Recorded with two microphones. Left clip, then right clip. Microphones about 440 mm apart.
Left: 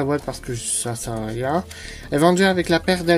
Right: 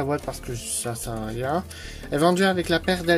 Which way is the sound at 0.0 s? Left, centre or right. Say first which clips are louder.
Left 4 dB; right.